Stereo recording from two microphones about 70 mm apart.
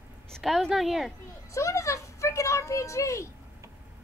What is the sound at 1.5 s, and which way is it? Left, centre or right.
Speech, left.